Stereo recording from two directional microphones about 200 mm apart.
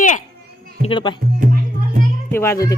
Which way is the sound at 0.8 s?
25° left (ahead or behind).